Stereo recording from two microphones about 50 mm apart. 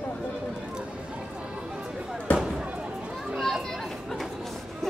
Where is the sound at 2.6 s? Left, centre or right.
Right.